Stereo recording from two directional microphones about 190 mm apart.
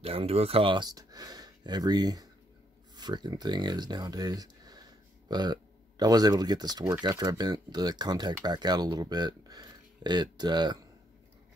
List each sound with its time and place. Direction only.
0.0 s speech: 30° right (ahead or behind)